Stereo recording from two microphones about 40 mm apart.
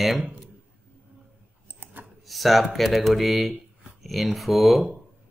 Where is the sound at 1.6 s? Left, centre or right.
Right.